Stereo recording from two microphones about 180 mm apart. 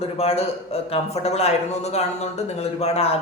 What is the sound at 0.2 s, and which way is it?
Speech, 35° left (ahead or behind).